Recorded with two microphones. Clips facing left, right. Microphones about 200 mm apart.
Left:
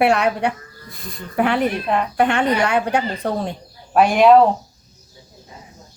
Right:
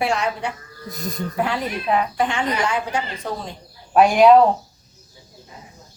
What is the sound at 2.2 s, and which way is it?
Speech, 60° left (ahead or behind).